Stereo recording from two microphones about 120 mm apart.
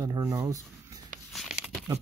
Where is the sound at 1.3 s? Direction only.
5° right (ahead or behind).